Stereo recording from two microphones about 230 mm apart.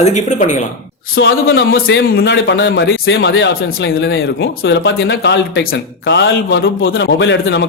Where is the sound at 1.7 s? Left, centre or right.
Left.